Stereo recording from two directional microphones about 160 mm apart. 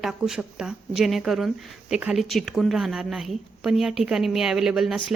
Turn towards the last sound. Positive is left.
turn(degrees=-5)  # may be behind; listen again after turning